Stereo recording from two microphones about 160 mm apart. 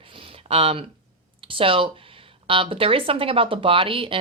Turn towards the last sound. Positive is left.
turn(degrees=-35)  # may be behind; listen again after turning